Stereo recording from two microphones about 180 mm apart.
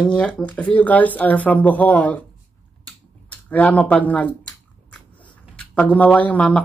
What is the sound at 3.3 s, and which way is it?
Speech, 10° left (ahead or behind).